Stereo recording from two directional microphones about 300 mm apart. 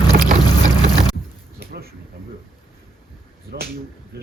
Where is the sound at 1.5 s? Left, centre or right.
Right.